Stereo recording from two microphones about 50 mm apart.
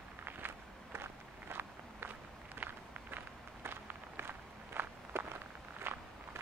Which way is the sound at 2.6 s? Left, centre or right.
Right.